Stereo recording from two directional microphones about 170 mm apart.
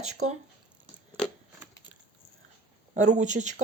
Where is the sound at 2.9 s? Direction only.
45° right (ahead or behind).